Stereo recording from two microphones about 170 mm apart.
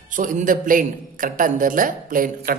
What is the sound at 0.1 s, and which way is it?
A man's voice, 50° right (ahead or behind).